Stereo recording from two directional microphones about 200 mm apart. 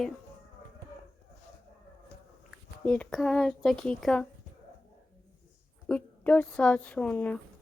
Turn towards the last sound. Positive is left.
turn(degrees=5)  # may be behind; listen again after turning